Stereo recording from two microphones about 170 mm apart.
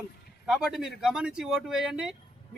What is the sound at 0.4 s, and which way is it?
A man's voice, centre (ahead or behind).